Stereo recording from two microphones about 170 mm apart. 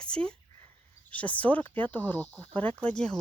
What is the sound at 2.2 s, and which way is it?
Speech, 15° right (ahead or behind).